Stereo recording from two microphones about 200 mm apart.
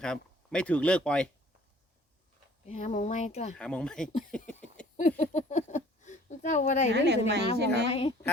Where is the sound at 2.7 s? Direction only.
35° left (ahead or behind).